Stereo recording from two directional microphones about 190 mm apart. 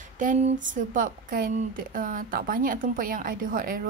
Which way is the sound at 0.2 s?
45° right (ahead or behind).